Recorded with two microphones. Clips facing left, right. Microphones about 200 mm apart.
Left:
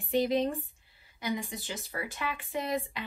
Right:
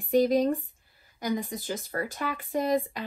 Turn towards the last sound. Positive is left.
turn(degrees=-45)  # may be behind; listen again after turning